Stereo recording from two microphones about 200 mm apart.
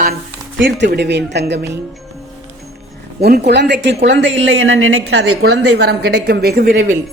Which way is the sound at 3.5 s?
55° right (ahead or behind).